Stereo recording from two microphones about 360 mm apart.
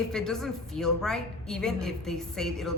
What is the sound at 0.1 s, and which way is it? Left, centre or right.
A woman's voice, centre.